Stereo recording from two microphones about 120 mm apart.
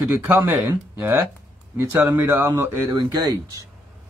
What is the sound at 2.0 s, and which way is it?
Speech, 20° right (ahead or behind).